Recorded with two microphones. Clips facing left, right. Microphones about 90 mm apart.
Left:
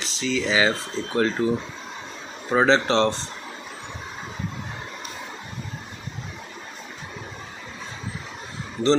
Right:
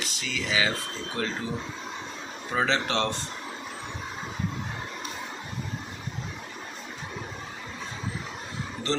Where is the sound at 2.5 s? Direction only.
35° left (ahead or behind).